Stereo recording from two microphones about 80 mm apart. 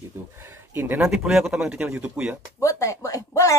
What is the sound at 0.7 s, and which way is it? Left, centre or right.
Speech, right.